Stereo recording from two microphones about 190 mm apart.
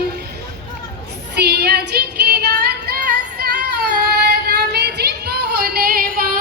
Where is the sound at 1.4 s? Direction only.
60° right (ahead or behind).